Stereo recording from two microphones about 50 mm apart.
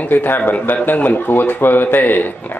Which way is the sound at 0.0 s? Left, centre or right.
Left.